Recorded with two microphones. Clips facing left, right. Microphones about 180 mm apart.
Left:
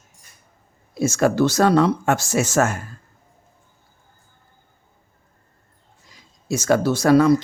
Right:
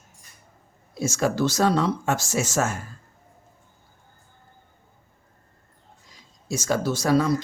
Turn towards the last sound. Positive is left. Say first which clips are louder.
# left 6 dB
turn(degrees=65)  # may be behind; listen again after turning